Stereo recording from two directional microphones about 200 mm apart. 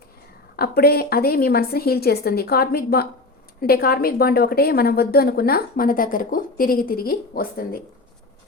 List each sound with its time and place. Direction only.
0.5 s a woman's voice: 50° left (ahead or behind)